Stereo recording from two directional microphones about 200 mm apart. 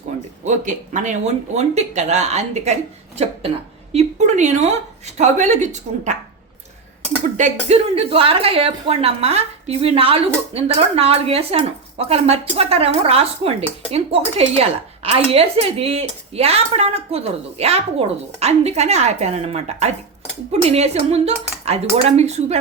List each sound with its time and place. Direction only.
0.4 s speech: 40° right (ahead or behind)
3.9 s speech: 35° right (ahead or behind)
7.3 s speech: 35° right (ahead or behind)